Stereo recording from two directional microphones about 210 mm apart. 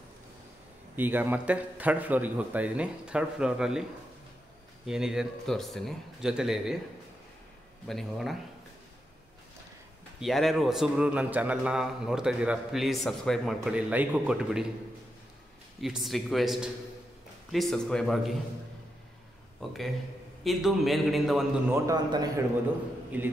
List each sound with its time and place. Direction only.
0.9 s a man's voice: 10° right (ahead or behind)
4.8 s speech: centre (ahead or behind)
7.9 s speech: centre (ahead or behind)
10.2 s speech: centre (ahead or behind)
15.8 s speech: centre (ahead or behind)
19.6 s speech: centre (ahead or behind)
21.7 s a man's voice: 15° right (ahead or behind)
23.1 s a man's voice: 5° right (ahead or behind)